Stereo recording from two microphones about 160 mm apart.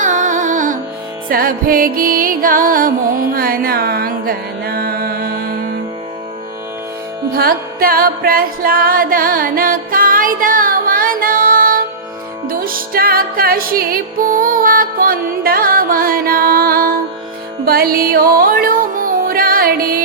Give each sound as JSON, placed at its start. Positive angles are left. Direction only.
{"t": 0.0, "sound": "music", "side_deg": -50}
{"t": 7.3, "sound": "music", "side_deg": -70}